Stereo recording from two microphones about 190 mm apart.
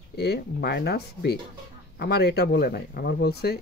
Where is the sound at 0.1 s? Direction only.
60° left (ahead or behind).